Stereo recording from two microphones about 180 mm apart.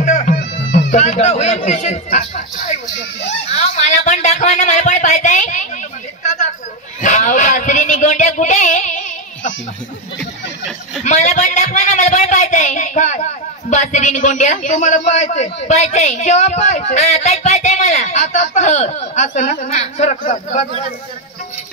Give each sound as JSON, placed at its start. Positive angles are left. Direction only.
{"t": 0.0, "sound": "music", "side_deg": 40}
{"t": 0.9, "sound": "a man's voice", "side_deg": 40}
{"t": 6.2, "sound": "chatter", "side_deg": 40}
{"t": 7.0, "sound": "a man's voice", "side_deg": 45}
{"t": 11.1, "sound": "a man's voice", "side_deg": 40}